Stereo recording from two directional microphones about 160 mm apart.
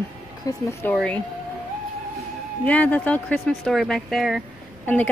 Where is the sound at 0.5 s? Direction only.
20° left (ahead or behind).